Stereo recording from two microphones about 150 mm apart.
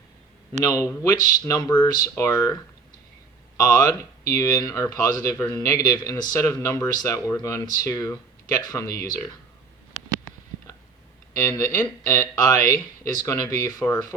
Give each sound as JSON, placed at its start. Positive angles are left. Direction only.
{"t": 0.6, "sound": "speech", "side_deg": 25}
{"t": 3.6, "sound": "speech", "side_deg": 25}
{"t": 11.4, "sound": "speech", "side_deg": 25}